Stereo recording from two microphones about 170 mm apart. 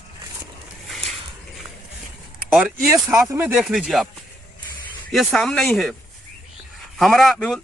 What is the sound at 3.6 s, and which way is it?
Speech, centre (ahead or behind).